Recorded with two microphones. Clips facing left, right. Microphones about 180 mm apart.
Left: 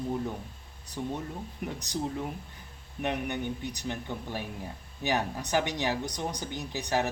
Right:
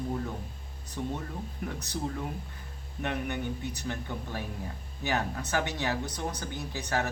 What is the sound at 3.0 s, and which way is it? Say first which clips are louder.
Speech: left 1 dB; 20° left (ahead or behind).